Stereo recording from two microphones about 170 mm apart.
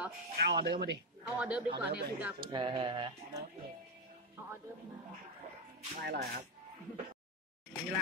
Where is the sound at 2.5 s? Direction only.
30° right (ahead or behind).